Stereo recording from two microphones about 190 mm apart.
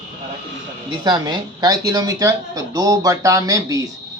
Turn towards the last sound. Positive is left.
turn(degrees=-15)  # may be behind; listen again after turning